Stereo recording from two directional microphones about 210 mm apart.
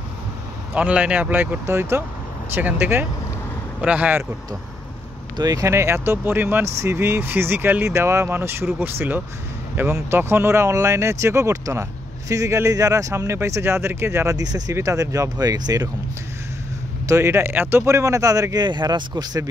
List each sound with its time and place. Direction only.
0.7 s speech: 5° right (ahead or behind)
5.4 s speech: 15° right (ahead or behind)
17.1 s speech: 10° right (ahead or behind)